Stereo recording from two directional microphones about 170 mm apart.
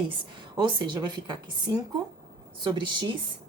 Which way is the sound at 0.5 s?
25° right (ahead or behind).